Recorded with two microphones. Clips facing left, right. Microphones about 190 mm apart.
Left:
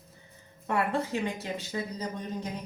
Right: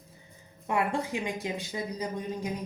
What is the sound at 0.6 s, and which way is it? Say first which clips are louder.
Speech: even; 15° right (ahead or behind).